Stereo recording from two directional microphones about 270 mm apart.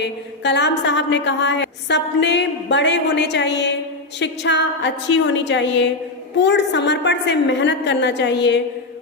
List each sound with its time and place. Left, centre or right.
0.0 s a woman's voice: left